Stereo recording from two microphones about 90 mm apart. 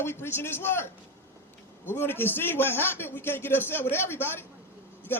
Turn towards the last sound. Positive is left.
turn(degrees=25)  # may be behind; listen again after turning